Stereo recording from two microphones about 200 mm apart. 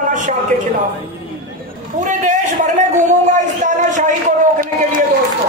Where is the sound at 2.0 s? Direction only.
40° right (ahead or behind).